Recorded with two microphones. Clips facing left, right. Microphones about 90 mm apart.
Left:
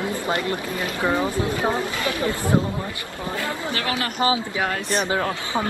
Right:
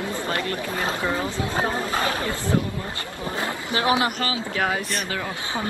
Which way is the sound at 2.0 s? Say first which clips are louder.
Even; 35° right (ahead or behind).